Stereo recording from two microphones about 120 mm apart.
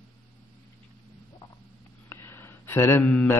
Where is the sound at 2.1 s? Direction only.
20° left (ahead or behind).